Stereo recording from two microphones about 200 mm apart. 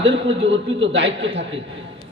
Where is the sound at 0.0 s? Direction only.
65° right (ahead or behind).